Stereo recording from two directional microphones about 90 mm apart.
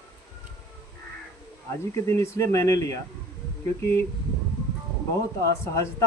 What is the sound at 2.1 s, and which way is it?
Speech, 35° left (ahead or behind).